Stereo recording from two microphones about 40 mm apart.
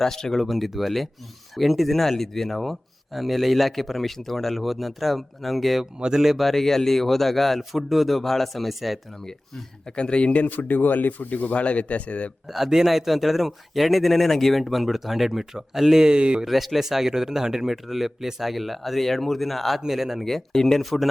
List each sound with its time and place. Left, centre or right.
0.0 s speech: centre
5.8 s speech: centre
6.4 s speech: centre
9.9 s speech: left
10.4 s speech: left
12.5 s speech: centre; by 16.5 s right
16.5 s speech: centre
20.2 s speech: centre